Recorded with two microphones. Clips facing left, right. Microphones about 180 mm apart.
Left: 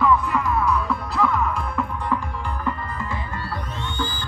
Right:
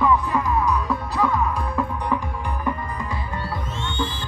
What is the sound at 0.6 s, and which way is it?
Music, 15° right (ahead or behind).